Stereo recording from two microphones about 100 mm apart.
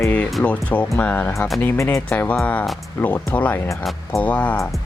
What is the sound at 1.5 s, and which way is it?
Speech, 25° left (ahead or behind).